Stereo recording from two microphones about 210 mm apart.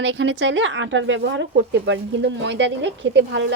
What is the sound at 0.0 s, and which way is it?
Speech, 60° right (ahead or behind).